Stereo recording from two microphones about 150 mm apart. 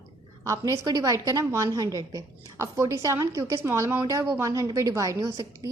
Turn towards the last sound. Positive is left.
turn(degrees=-20)  # may be behind; listen again after turning